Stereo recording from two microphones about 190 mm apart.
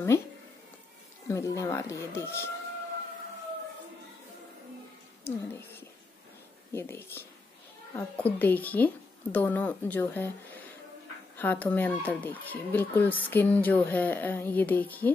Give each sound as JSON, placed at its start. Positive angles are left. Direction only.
{"t": 1.3, "sound": "speech", "side_deg": 15}
{"t": 5.2, "sound": "speech", "side_deg": 10}
{"t": 11.3, "sound": "speech", "side_deg": 10}